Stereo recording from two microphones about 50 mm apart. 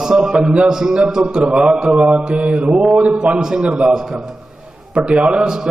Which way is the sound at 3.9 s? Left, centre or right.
Centre.